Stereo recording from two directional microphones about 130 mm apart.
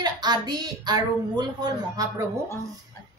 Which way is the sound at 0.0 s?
35° right (ahead or behind).